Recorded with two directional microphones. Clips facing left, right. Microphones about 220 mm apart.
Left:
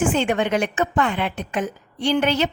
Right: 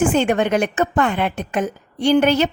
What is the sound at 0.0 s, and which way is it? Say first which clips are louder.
Speech: right 3 dB; 45° right (ahead or behind).